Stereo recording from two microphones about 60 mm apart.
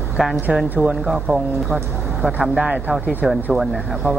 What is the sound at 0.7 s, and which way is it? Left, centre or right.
Speech, right.